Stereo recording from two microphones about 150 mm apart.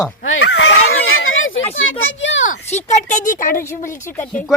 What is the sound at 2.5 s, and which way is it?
A woman's voice, 50° left (ahead or behind).